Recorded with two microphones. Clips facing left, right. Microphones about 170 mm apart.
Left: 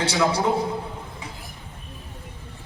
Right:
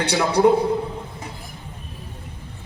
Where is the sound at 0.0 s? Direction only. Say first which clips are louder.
Right 2 dB; 65° right (ahead or behind).